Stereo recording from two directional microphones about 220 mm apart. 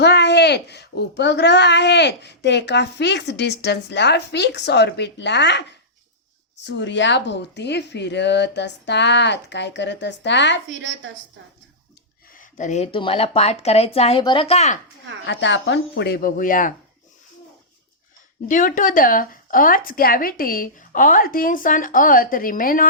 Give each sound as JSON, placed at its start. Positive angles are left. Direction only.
{"t": 0.0, "sound": "a woman's voice", "side_deg": 50}
{"t": 6.7, "sound": "a woman's voice", "side_deg": 55}
{"t": 10.7, "sound": "a woman's voice", "side_deg": -55}
{"t": 12.3, "sound": "speech", "side_deg": 35}
{"t": 15.3, "sound": "a woman's voice", "side_deg": 55}
{"t": 18.4, "sound": "speech", "side_deg": 35}